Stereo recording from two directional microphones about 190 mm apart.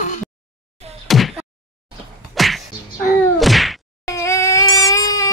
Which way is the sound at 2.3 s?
Centre (ahead or behind).